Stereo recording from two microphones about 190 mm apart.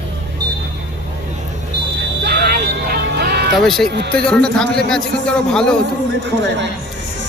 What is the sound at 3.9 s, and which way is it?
Speech, 60° right (ahead or behind).